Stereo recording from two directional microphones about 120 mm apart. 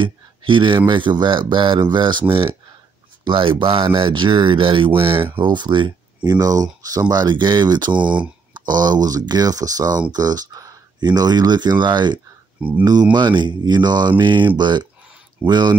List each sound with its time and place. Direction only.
0.0 s speech: 40° right (ahead or behind)
12.6 s speech: 10° right (ahead or behind)
13.1 s speech: 40° right (ahead or behind)